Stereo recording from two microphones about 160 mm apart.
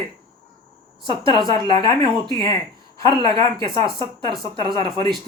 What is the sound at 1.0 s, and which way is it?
Speech, 30° right (ahead or behind).